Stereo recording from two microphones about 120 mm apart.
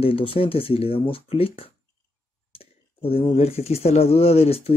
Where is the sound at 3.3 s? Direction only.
60° left (ahead or behind).